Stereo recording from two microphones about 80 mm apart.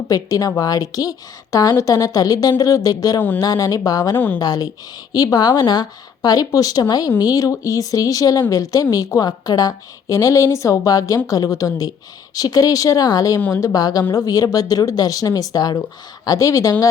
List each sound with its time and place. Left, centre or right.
0.1 s a woman's voice: left
4.1 s a woman's voice: left
4.4 s a woman's voice: left